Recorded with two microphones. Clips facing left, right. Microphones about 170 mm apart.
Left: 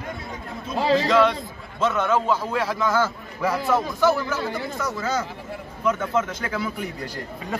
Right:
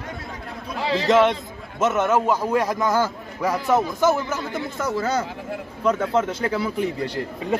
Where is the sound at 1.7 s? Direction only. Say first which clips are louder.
Right 2 dB; 20° right (ahead or behind).